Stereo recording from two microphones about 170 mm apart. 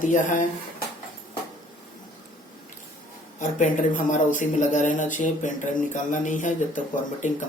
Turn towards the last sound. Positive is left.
turn(degrees=50)  # may be behind; listen again after turning